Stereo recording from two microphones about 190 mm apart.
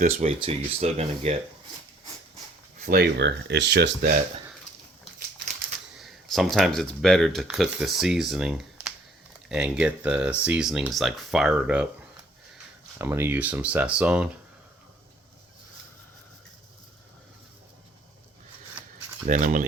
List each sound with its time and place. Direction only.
0.3 s speech: 30° right (ahead or behind)
2.8 s speech: 55° right (ahead or behind)
6.0 s speech: centre (ahead or behind)
13.0 s speech: 15° right (ahead or behind)
19.2 s speech: 40° right (ahead or behind)